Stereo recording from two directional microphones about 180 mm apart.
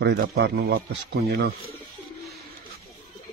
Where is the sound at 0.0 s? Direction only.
65° right (ahead or behind).